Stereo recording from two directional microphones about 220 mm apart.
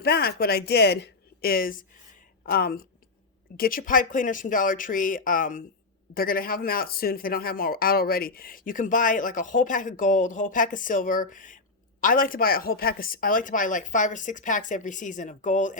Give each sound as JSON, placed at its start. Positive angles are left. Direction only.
{"t": 0.0, "sound": "a woman's voice", "side_deg": 45}